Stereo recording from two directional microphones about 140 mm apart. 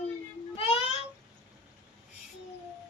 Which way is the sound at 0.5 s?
45° left (ahead or behind).